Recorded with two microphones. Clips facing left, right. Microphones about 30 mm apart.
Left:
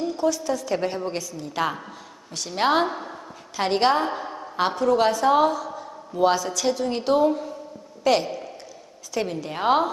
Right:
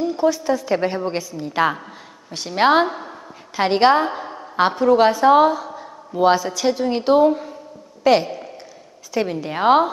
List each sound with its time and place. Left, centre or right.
0.0 s a woman's voice: centre
3.5 s a woman's voice: centre
4.6 s a woman's voice: centre